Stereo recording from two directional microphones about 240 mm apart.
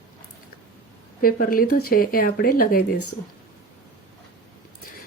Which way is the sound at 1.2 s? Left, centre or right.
Left.